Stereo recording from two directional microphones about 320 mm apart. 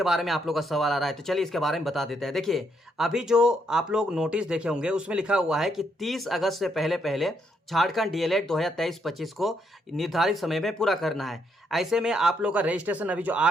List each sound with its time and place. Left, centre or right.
0.0 s speech: centre